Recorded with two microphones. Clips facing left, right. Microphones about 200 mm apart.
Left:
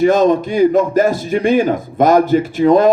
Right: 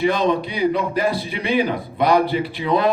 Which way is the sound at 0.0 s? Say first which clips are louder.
Left 7 dB; 45° left (ahead or behind).